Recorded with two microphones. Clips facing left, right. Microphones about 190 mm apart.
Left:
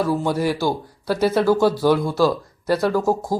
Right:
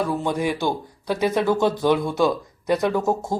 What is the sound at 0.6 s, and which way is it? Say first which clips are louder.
Speech: left 2 dB; 15° right (ahead or behind).